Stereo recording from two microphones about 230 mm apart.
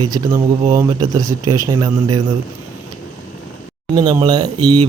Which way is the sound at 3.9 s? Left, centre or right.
Centre.